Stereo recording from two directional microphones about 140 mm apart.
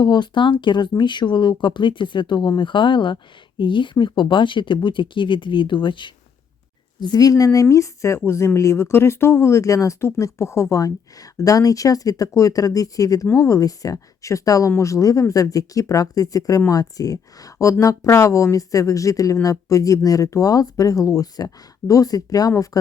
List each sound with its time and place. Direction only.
0.0 s speech: 35° left (ahead or behind)